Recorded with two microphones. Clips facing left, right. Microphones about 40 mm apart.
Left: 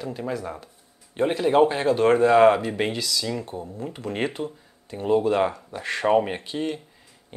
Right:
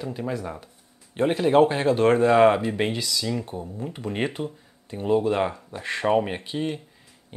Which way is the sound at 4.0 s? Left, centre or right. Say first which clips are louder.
Even; centre.